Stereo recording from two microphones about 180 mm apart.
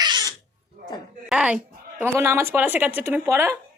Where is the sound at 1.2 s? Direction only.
5° right (ahead or behind).